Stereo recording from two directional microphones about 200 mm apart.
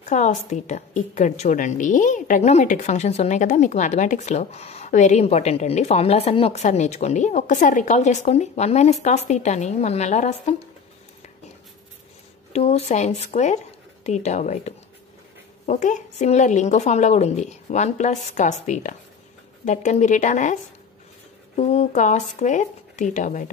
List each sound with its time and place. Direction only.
0.0 s a woman's voice: 35° left (ahead or behind)
12.5 s a woman's voice: 35° left (ahead or behind)
21.5 s a woman's voice: 35° left (ahead or behind)